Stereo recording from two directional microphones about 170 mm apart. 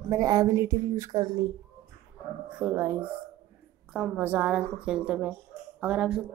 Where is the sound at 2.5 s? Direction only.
15° right (ahead or behind).